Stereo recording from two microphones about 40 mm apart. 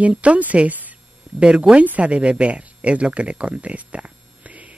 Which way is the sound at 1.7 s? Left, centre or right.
Right.